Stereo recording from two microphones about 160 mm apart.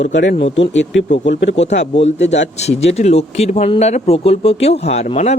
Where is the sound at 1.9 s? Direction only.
40° left (ahead or behind).